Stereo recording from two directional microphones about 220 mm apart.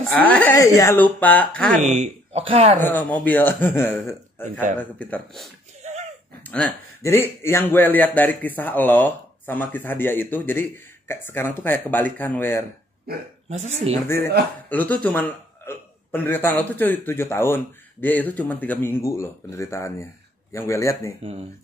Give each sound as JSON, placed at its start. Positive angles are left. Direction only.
{"t": 0.0, "sound": "a man's voice", "side_deg": 5}
{"t": 1.8, "sound": "speech", "side_deg": -30}
{"t": 2.8, "sound": "a man's voice", "side_deg": 10}
{"t": 5.8, "sound": "a sound", "side_deg": -30}
{"t": 6.4, "sound": "a man's voice", "side_deg": 5}
{"t": 13.1, "sound": "speech", "side_deg": -45}
{"t": 14.0, "sound": "a man's voice", "side_deg": 10}
{"t": 21.2, "sound": "speech", "side_deg": -30}